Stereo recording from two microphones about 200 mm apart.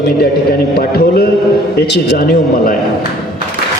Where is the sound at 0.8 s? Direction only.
50° left (ahead or behind).